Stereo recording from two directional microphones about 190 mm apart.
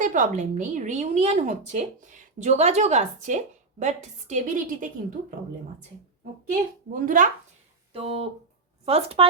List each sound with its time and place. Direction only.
0.0 s a woman's voice: 45° right (ahead or behind)
6.9 s speech: 45° right (ahead or behind)
7.9 s a woman's voice: 30° right (ahead or behind)